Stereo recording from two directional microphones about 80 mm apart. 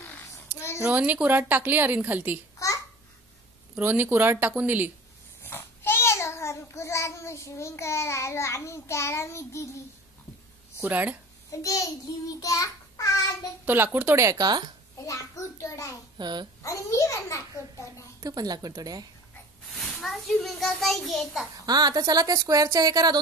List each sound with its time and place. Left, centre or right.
0.0 s a sound: left
0.8 s speech: centre
3.8 s speech: right
5.4 s a child's voice: left
10.8 s speech: right
11.5 s a child's voice: left
14.3 s speech: right
15.0 s a child's voice: left
16.2 s a child's voice: right
16.6 s a child's voice: left
18.2 s speech: right
19.7 s a child's voice: centre
21.6 s a woman's voice: right